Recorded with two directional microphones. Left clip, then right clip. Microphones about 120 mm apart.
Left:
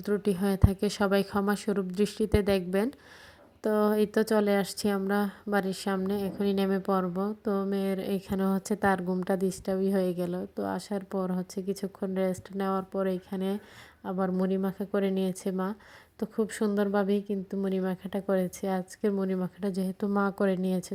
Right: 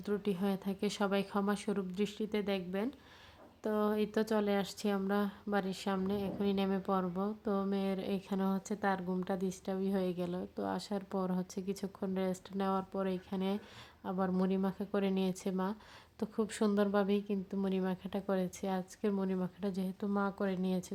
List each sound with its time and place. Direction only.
0.0 s a woman's voice: 35° left (ahead or behind); by 2.9 s 50° left (ahead or behind)
3.6 s a woman's voice: 40° left (ahead or behind)